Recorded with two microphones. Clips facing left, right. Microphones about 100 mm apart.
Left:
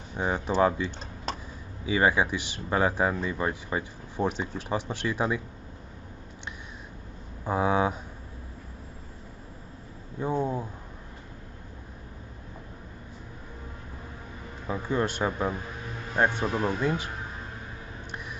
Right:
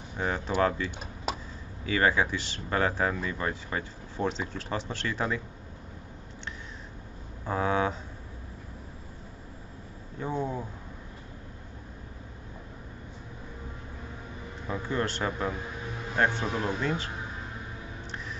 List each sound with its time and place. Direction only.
0.2 s speech: 15° left (ahead or behind)
1.3 s a sound: 5° right (ahead or behind)
1.9 s speech: 15° left (ahead or behind)
7.4 s speech: 15° left (ahead or behind)
10.2 s speech: 15° left (ahead or behind)
14.7 s speech: 15° left (ahead or behind)